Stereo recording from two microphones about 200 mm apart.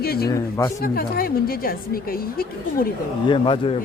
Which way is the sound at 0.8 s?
45° left (ahead or behind).